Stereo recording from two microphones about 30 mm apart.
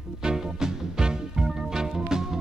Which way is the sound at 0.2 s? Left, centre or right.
Right.